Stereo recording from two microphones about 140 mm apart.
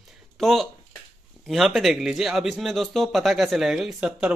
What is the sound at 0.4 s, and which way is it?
Speech, centre (ahead or behind).